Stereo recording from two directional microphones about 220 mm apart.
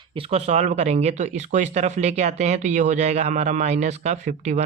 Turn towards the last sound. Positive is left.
turn(degrees=-35)  # may be behind; listen again after turning